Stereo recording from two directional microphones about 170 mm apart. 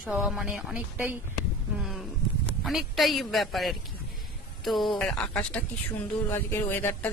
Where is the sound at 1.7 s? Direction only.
Centre (ahead or behind).